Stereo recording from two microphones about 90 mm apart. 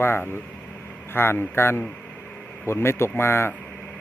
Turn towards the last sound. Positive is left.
turn(degrees=15)  # may be behind; listen again after turning